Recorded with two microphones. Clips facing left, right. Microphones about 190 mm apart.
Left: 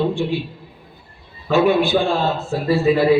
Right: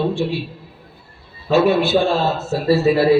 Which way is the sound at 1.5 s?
15° left (ahead or behind).